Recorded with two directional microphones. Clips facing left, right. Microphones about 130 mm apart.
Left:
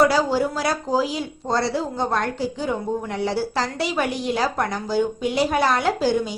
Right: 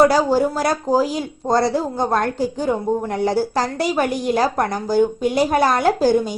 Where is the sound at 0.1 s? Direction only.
45° right (ahead or behind).